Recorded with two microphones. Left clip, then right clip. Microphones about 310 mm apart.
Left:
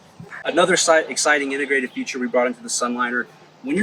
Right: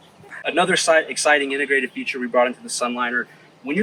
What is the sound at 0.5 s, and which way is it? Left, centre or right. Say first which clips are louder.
Speech: left 1 dB; centre.